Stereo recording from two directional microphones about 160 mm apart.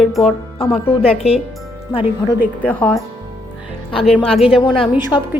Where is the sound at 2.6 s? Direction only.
10° left (ahead or behind).